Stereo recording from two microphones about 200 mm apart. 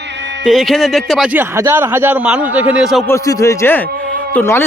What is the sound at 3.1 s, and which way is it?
A man's voice, 15° left (ahead or behind).